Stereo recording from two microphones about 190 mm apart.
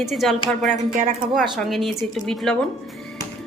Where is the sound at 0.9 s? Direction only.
45° right (ahead or behind).